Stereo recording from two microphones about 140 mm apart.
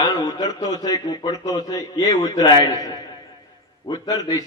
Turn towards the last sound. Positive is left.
turn(degrees=25)  # may be behind; listen again after turning